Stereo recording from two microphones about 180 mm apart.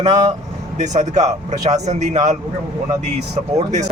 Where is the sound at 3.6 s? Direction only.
40° right (ahead or behind).